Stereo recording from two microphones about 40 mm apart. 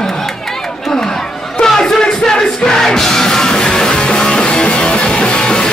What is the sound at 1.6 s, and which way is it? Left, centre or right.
Music, centre.